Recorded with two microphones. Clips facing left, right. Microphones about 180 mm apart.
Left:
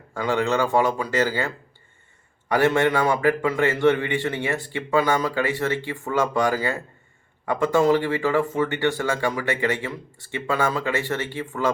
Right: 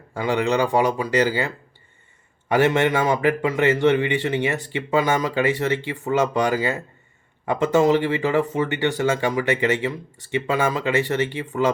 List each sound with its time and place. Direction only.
0.1 s speech: 15° right (ahead or behind)
2.5 s speech: 20° right (ahead or behind)